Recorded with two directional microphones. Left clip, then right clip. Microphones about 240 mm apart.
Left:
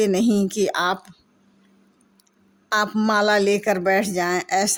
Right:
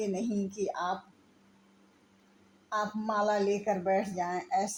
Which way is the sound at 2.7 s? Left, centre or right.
Left.